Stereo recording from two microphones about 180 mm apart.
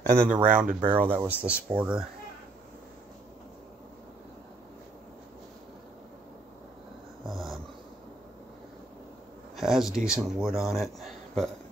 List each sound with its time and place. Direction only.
0.3 s speech: 45° right (ahead or behind)
0.8 s speech: 10° right (ahead or behind)
7.2 s dog: centre (ahead or behind)
9.6 s speech: centre (ahead or behind)